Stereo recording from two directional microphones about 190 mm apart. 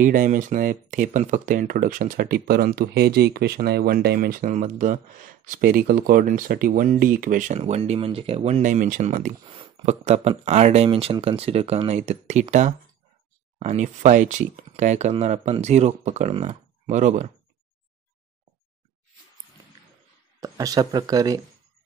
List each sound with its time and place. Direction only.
0.0 s speech: 45° right (ahead or behind)
9.5 s speech: 30° right (ahead or behind)
20.3 s speech: 20° right (ahead or behind)